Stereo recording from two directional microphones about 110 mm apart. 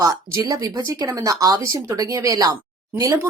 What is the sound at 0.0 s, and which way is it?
A woman's voice, 30° right (ahead or behind).